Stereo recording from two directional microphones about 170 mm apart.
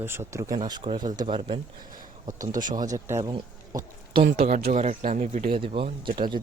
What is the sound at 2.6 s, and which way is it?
Speech, 25° right (ahead or behind).